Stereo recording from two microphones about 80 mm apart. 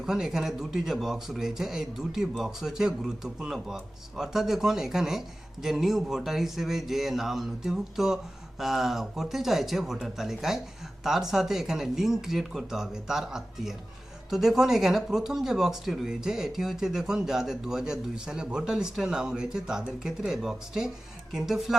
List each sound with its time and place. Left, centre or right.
0.0 s speech: centre